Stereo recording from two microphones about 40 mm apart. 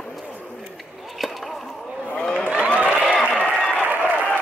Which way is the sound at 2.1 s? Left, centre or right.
Left.